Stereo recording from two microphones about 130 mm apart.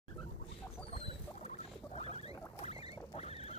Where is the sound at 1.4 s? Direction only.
55° left (ahead or behind).